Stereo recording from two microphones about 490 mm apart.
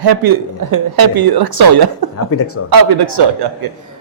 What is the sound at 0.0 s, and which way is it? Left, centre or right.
A woman's voice, right.